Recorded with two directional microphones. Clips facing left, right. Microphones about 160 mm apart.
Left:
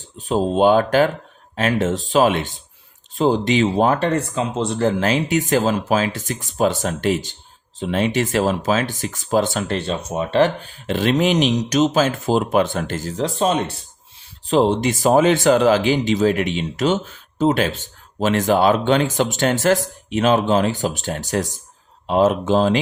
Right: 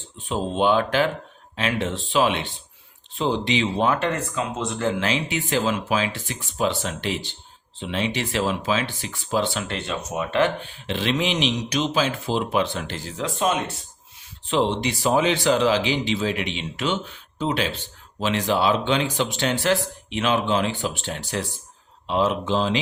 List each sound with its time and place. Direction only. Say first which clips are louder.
0.2 s speech: left 6 dB; 35° left (ahead or behind)